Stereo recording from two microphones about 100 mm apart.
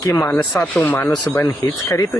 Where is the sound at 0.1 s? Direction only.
25° left (ahead or behind).